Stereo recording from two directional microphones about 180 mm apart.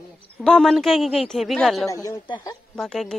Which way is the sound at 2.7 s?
5° left (ahead or behind).